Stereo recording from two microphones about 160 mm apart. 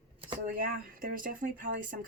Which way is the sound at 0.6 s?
60° right (ahead or behind).